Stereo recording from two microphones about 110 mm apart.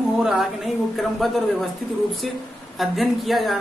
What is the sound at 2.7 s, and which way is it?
Speech, centre (ahead or behind).